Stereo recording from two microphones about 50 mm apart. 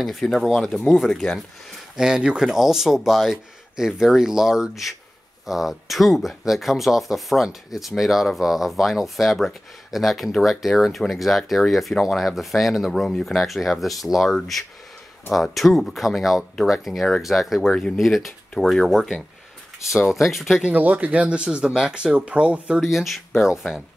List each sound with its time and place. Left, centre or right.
0.0 s speech: centre
2.0 s speech: centre
15.4 s speech: centre
17.6 s speech: centre
17.9 s speech: centre
20.7 s speech: right
21.4 s speech: centre
22.8 s speech: centre